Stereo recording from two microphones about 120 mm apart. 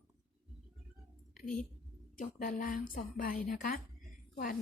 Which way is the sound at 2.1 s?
90° left.